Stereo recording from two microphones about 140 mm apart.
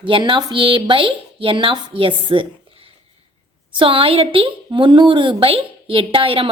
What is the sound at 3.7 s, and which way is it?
A woman's voice, 35° right (ahead or behind).